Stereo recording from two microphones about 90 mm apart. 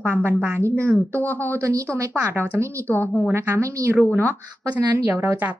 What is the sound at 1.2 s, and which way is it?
Speech, 20° left (ahead or behind).